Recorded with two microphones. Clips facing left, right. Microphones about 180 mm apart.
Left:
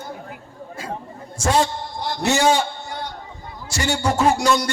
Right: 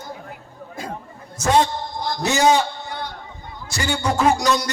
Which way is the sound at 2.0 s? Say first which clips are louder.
Left 2 dB; 35° left (ahead or behind).